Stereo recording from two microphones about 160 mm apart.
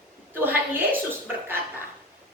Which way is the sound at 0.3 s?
15° right (ahead or behind).